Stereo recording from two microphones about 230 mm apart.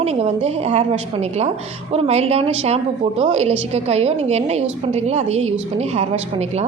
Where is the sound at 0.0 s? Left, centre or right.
Right.